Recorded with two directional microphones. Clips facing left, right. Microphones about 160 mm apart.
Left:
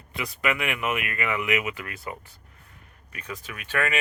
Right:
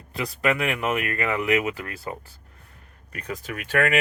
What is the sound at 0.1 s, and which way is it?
Speech, 35° right (ahead or behind).